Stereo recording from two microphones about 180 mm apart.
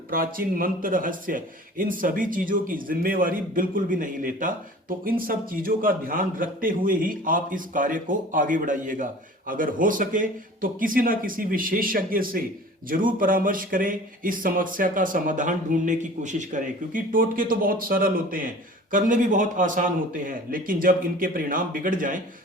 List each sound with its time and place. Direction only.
0.1 s speech: 50° right (ahead or behind)